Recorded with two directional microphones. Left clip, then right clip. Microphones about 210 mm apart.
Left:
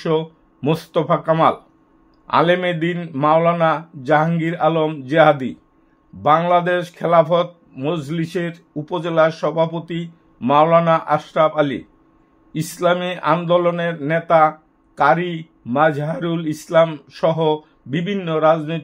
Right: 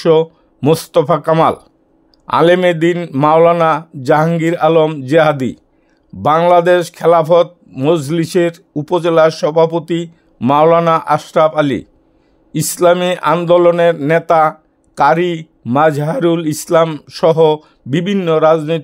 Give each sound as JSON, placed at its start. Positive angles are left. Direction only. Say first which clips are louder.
{"t": 0.0, "sound": "a man's voice", "louder": "right 9 dB", "side_deg": -55}